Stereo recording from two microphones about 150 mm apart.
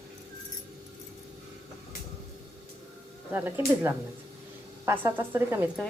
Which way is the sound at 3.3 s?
15° right (ahead or behind).